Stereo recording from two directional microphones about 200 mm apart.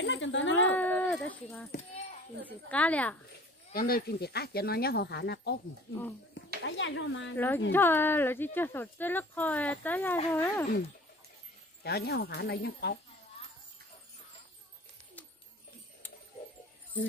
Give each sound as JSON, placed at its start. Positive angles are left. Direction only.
{"t": 0.0, "sound": "a sound", "side_deg": 65}
{"t": 0.7, "sound": "a sound", "side_deg": 10}
{"t": 2.4, "sound": "speech", "side_deg": 5}
{"t": 3.7, "sound": "speech", "side_deg": 50}
{"t": 6.6, "sound": "speech", "side_deg": 70}
{"t": 7.3, "sound": "speech", "side_deg": 10}
{"t": 11.8, "sound": "speech", "side_deg": 55}